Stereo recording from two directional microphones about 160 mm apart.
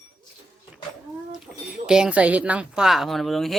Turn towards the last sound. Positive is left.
turn(degrees=0)  # may be behind; listen again after turning